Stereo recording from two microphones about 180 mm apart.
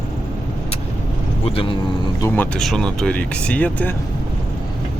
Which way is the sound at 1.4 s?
30° left (ahead or behind).